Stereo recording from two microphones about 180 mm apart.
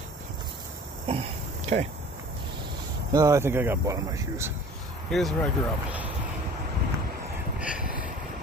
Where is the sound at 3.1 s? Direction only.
15° right (ahead or behind).